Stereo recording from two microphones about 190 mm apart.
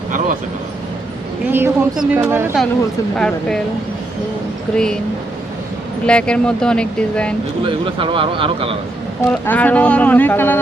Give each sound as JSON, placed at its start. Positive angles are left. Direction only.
{"t": 1.5, "sound": "speech", "side_deg": -10}
{"t": 3.2, "sound": "speech", "side_deg": 5}
{"t": 4.7, "sound": "speech", "side_deg": 5}
{"t": 6.1, "sound": "speech", "side_deg": 5}
{"t": 7.6, "sound": "speech", "side_deg": -25}
{"t": 9.2, "sound": "speech", "side_deg": 10}